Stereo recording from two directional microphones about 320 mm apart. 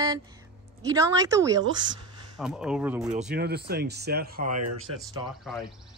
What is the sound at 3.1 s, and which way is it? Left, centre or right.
Speech, right.